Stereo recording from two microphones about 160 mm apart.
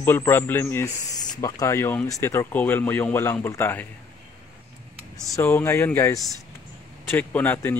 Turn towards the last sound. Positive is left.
turn(degrees=10)  # may be behind; listen again after turning